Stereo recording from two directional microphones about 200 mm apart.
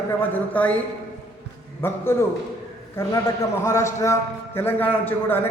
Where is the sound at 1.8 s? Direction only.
10° left (ahead or behind).